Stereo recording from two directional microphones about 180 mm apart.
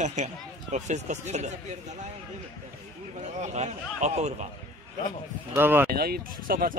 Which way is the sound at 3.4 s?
40° right (ahead or behind).